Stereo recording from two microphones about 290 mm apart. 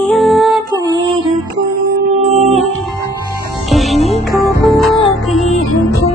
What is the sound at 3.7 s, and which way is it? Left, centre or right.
Music, centre.